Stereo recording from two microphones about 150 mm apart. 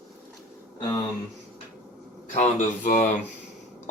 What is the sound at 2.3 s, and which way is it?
Speech, 60° left (ahead or behind).